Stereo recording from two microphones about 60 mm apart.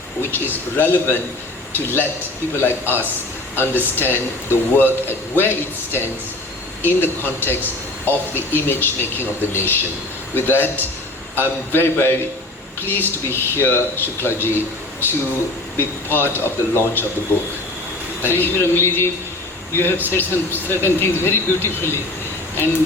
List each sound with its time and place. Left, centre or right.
0.2 s speech: left
15.8 s speech: left